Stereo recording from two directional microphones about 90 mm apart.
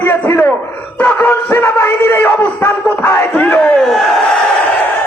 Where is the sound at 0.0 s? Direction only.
25° left (ahead or behind).